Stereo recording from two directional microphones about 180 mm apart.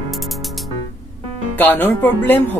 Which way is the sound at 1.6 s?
10° left (ahead or behind).